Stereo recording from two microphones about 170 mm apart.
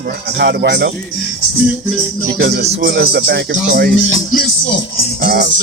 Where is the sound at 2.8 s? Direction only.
85° right; by 3.9 s 70° right (ahead or behind).